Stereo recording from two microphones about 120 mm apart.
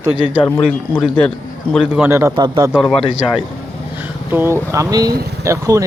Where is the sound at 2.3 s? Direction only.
40° right (ahead or behind).